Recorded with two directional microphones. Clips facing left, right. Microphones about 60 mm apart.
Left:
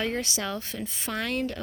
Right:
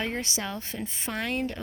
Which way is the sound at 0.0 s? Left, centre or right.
Right.